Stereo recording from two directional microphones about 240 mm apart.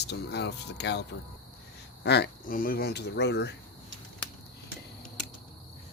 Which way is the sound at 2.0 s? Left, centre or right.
Left.